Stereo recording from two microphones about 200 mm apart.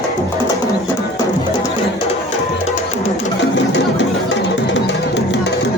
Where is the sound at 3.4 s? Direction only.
65° left (ahead or behind).